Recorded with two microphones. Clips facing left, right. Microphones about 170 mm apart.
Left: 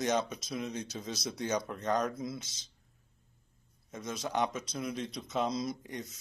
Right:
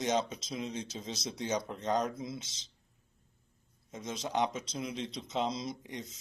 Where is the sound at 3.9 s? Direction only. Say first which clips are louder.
Even; 25° right (ahead or behind).